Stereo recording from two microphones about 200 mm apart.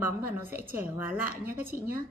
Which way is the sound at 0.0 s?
10° right (ahead or behind).